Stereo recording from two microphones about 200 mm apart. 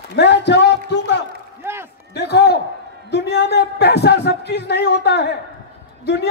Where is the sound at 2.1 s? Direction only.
55° left (ahead or behind).